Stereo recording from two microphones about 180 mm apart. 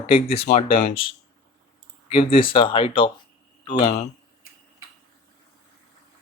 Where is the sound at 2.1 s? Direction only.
30° left (ahead or behind).